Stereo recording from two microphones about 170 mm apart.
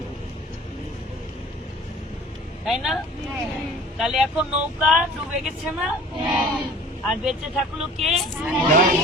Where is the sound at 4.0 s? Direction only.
5° right (ahead or behind).